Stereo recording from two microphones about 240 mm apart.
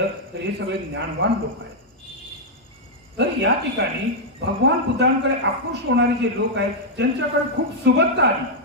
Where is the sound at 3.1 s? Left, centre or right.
Right.